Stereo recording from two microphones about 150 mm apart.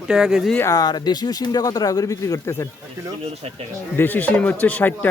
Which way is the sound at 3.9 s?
10° left (ahead or behind).